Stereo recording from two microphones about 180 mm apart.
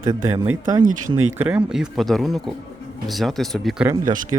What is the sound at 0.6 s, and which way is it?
Speech, 20° right (ahead or behind).